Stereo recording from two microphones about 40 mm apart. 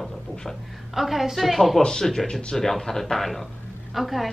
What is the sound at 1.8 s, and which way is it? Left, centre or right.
A woman's voice, centre.